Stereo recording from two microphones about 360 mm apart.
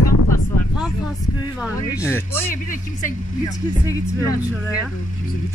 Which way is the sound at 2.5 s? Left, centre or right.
Left.